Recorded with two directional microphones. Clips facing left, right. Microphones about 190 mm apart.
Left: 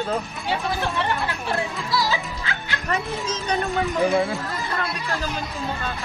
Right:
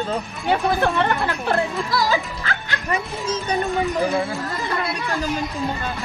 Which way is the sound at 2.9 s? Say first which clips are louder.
Right 2 dB; 10° right (ahead or behind).